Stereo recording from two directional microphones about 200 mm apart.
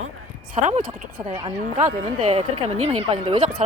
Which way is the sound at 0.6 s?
40° right (ahead or behind).